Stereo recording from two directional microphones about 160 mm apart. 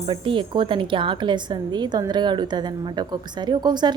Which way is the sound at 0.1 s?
30° right (ahead or behind).